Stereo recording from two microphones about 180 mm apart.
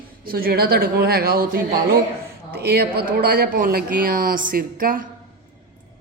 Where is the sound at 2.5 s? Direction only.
60° right (ahead or behind).